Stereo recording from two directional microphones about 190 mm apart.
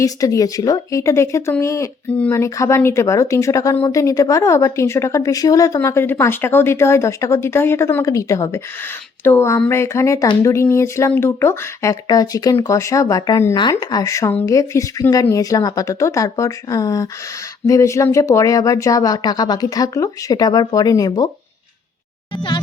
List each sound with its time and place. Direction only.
0.0 s speech: 15° left (ahead or behind)